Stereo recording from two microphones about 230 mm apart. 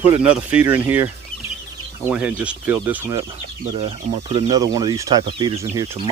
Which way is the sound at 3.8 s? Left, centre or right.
Right.